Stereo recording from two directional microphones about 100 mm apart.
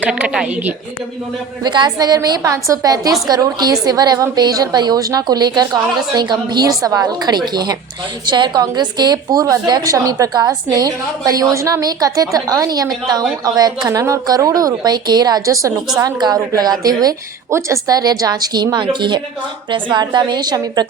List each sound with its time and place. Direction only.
0.0 s a woman's voice: 15° right (ahead or behind)
1.6 s a woman's voice: 45° right (ahead or behind)